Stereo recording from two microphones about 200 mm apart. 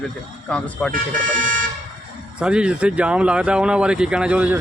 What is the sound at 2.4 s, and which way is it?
Speech, 5° right (ahead or behind).